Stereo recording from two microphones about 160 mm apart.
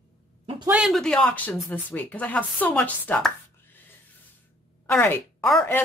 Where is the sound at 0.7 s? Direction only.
5° right (ahead or behind).